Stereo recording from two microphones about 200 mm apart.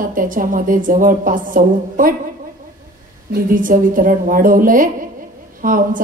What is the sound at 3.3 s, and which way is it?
A woman's voice, 40° right (ahead or behind).